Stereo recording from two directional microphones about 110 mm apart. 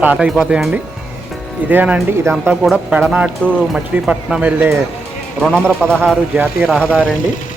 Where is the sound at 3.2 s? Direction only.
10° left (ahead or behind).